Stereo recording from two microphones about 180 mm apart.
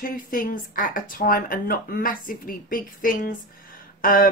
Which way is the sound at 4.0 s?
50° left (ahead or behind).